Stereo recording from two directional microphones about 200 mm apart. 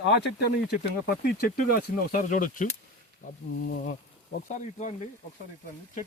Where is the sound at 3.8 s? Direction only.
40° left (ahead or behind).